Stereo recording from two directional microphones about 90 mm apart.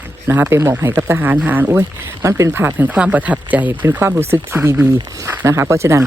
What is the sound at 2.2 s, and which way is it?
Speech, 30° right (ahead or behind).